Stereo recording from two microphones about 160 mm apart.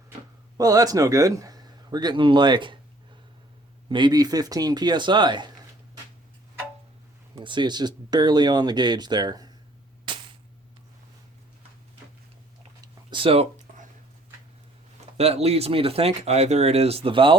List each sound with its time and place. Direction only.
0.5 s a man's voice: 20° right (ahead or behind)
3.8 s speech: 30° right (ahead or behind)
7.3 s speech: 30° right (ahead or behind)
10.1 s cap gun: 30° right (ahead or behind)
13.1 s a sound: 35° right (ahead or behind)
15.2 s speech: 40° right (ahead or behind)